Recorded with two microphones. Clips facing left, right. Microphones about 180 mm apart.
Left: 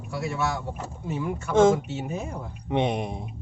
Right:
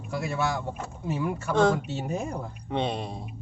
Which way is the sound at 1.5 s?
20° left (ahead or behind).